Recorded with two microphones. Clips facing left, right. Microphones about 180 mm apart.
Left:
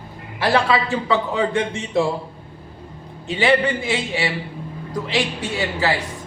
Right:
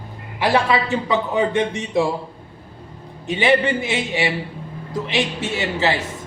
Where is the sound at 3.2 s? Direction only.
20° right (ahead or behind).